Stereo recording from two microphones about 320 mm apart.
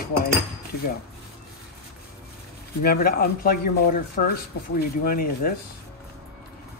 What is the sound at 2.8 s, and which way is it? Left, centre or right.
Speech, left.